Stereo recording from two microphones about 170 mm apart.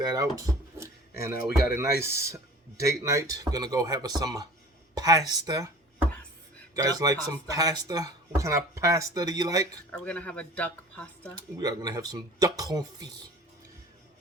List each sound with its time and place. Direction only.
0.0 s speech: 20° right (ahead or behind)
6.7 s speech: 20° right (ahead or behind)
9.9 s speech: 5° left (ahead or behind)
11.6 s speech: 20° right (ahead or behind)